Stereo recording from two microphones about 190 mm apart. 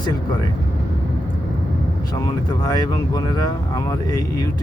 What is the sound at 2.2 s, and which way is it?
Speech, 20° left (ahead or behind).